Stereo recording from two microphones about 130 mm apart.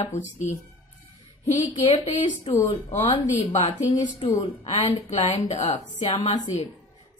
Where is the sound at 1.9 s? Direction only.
50° left (ahead or behind).